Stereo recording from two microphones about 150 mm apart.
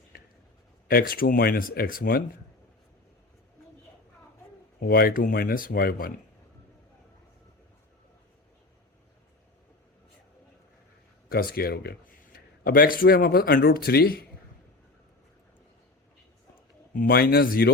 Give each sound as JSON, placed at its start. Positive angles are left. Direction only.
{"t": 0.9, "sound": "speech", "side_deg": 80}
{"t": 4.8, "sound": "speech", "side_deg": 85}
{"t": 11.3, "sound": "speech", "side_deg": 85}
{"t": 16.9, "sound": "speech", "side_deg": 80}